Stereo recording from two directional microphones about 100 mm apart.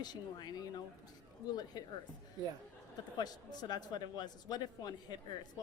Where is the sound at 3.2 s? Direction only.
45° left (ahead or behind).